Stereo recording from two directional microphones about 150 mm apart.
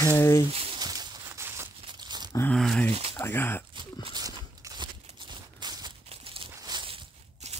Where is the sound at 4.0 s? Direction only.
30° right (ahead or behind).